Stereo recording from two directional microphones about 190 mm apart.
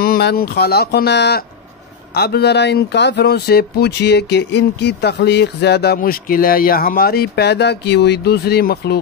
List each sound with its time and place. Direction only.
0.0 s speech: 55° left (ahead or behind)